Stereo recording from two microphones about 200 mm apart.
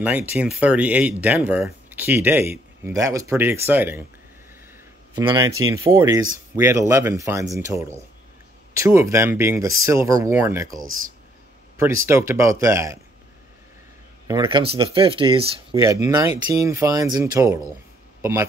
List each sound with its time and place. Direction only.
0.0 s speech: 10° right (ahead or behind)
5.1 s speech: 20° right (ahead or behind)
11.8 s speech: 15° right (ahead or behind)
14.2 s speech: 20° right (ahead or behind)
15.7 s speech: 15° right (ahead or behind)